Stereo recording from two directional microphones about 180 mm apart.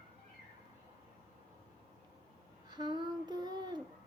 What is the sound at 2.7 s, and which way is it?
Child singing, 25° right (ahead or behind).